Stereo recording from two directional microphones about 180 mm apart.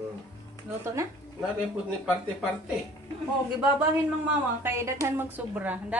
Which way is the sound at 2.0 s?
5° right (ahead or behind).